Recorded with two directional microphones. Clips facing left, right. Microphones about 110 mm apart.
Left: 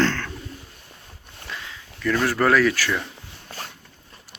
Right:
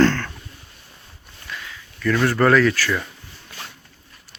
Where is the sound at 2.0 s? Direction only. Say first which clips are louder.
Right 3 dB; 10° left (ahead or behind).